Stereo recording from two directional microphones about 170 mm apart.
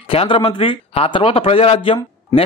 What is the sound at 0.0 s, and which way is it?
A man's voice, 30° left (ahead or behind).